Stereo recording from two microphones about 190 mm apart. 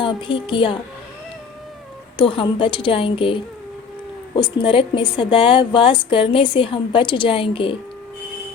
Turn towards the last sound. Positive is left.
turn(degrees=30)  # may be behind; listen again after turning